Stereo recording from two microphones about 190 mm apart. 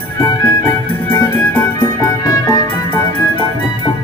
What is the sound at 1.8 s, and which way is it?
Music, 20° left (ahead or behind).